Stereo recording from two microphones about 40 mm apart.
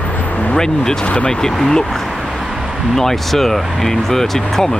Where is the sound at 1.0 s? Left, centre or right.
Left.